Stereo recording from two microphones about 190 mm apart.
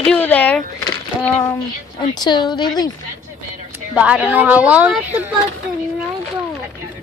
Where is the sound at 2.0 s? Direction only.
25° left (ahead or behind).